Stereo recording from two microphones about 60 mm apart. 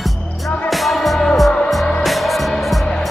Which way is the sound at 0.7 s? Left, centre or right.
Centre.